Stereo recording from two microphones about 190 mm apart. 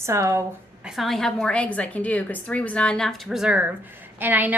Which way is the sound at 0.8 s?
Centre (ahead or behind).